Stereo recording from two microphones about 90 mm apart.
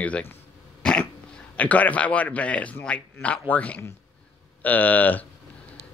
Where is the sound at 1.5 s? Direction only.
15° left (ahead or behind).